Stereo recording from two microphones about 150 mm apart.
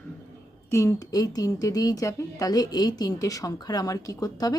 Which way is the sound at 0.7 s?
20° left (ahead or behind).